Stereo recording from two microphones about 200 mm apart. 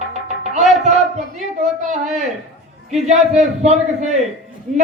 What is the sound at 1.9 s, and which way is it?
A man's voice, 35° right (ahead or behind).